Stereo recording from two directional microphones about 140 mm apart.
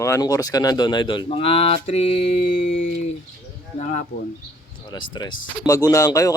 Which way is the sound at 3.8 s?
65° left (ahead or behind).